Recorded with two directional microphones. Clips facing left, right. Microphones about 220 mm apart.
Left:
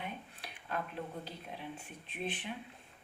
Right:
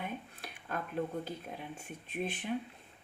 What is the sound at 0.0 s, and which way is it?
Dishes, 45° right (ahead or behind).